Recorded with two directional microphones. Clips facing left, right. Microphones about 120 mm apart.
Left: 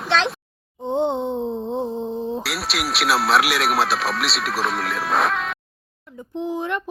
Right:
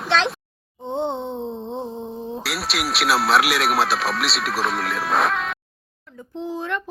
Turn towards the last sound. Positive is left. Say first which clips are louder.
# left 2 dB
turn(degrees=15)  # may be behind; listen again after turning